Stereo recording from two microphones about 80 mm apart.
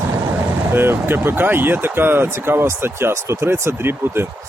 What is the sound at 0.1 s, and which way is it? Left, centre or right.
Speech, right.